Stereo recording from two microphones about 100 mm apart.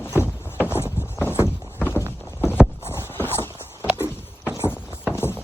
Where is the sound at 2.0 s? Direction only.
25° right (ahead or behind).